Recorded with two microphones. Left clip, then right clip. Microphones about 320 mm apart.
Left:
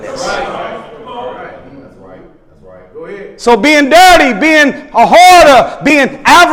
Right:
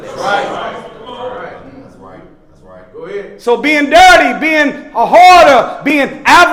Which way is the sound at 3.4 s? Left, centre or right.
Left.